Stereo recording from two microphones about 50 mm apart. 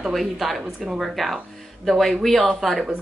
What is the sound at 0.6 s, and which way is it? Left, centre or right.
Speech, centre.